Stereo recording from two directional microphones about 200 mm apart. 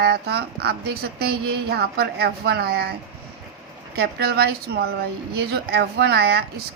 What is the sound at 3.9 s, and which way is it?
Speech, 55° right (ahead or behind).